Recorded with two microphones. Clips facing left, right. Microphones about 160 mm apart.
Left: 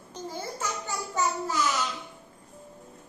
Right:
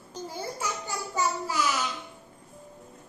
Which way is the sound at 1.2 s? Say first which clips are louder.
Even; 10° right (ahead or behind).